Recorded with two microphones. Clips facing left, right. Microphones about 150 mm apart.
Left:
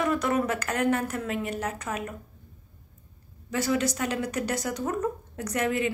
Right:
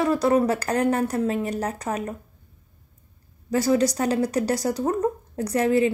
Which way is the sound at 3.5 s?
35° right (ahead or behind).